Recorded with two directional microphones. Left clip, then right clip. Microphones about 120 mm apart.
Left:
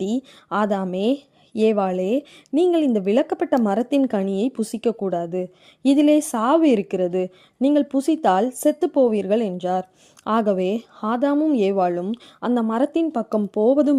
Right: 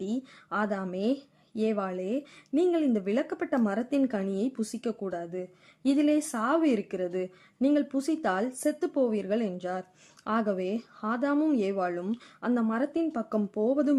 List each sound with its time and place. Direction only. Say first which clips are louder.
0.0 s speech: left 9 dB; 65° left (ahead or behind)
2.6 s speech: left 8 dB; 60° left (ahead or behind)
3.7 s speech: left 8 dB; 65° left (ahead or behind); by 13.9 s 50° left (ahead or behind)